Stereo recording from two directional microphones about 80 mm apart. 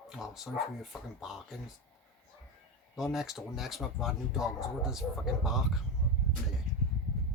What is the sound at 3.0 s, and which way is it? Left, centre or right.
Speech, centre.